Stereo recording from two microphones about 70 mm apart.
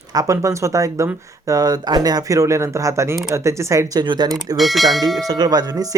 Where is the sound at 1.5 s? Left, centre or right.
Right.